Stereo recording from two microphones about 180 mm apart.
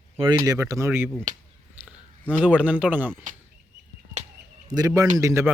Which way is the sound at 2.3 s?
5° right (ahead or behind).